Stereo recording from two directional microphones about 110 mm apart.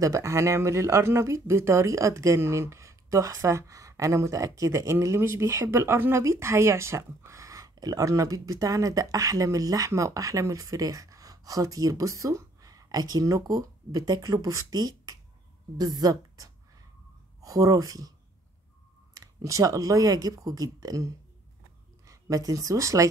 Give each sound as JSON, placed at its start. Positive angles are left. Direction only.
{"t": 0.0, "sound": "speech", "side_deg": -30}
{"t": 19.1, "sound": "speech", "side_deg": -30}